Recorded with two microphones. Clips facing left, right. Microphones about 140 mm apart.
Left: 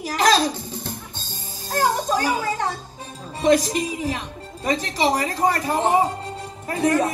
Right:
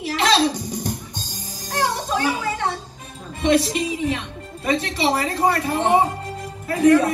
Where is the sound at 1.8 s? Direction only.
40° left (ahead or behind).